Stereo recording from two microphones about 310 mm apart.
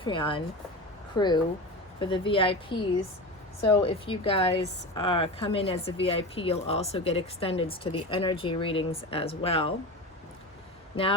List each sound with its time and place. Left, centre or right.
0.0 s a woman's voice: centre